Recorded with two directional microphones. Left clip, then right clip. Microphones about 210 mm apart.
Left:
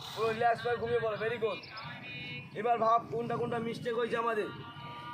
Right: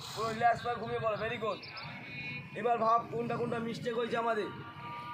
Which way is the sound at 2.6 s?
10° right (ahead or behind).